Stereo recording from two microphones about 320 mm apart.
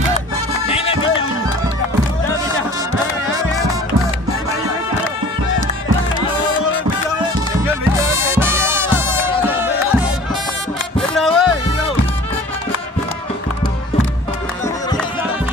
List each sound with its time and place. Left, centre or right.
0.7 s music: centre
7.6 s music: centre
11.0 s music: centre